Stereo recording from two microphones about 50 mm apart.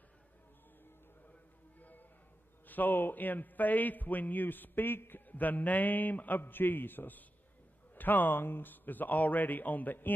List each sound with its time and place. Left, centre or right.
1.8 s music: left
2.6 s a man's voice: left
5.3 s a man's voice: left